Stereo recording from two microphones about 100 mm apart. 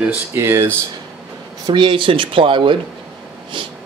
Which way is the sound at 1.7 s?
55° right (ahead or behind).